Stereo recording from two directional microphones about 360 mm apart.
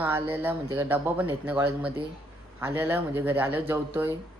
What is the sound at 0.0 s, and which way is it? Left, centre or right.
Speech, centre.